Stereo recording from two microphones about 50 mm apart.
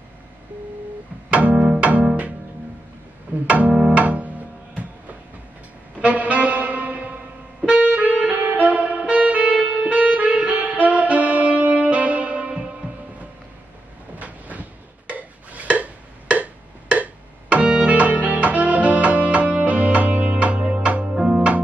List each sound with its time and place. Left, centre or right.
1.3 s music: right
3.4 s music: right
6.0 s music: right
8.4 s saxophone: right
12.8 s music: right
14.1 s a sound: right
16.9 s music: right
21.1 s music: centre